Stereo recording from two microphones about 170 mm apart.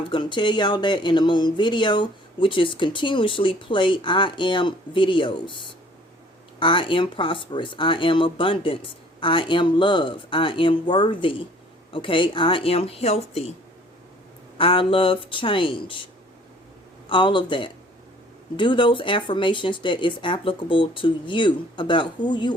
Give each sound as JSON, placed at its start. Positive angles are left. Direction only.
{"t": 0.0, "sound": "speech", "side_deg": 30}
{"t": 14.6, "sound": "speech", "side_deg": 30}
{"t": 17.1, "sound": "speech", "side_deg": 30}